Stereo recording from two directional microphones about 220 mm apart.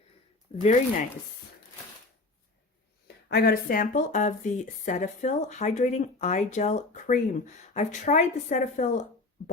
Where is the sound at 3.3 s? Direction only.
45° left (ahead or behind).